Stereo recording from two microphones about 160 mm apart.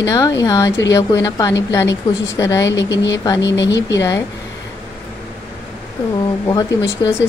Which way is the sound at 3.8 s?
20° left (ahead or behind).